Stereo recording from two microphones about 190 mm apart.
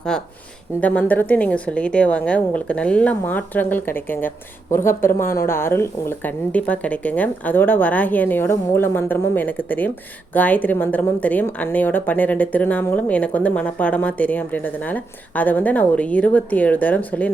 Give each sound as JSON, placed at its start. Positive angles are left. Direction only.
{"t": 0.1, "sound": "a woman's voice", "side_deg": 5}